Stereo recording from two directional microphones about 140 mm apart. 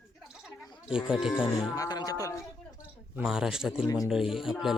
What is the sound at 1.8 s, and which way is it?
Speech, 30° left (ahead or behind).